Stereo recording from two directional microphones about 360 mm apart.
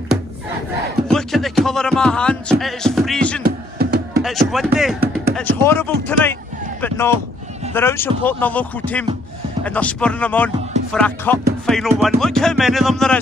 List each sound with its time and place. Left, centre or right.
1.0 s speech: centre
3.4 s music: right
4.2 s speech: centre
7.7 s speech: centre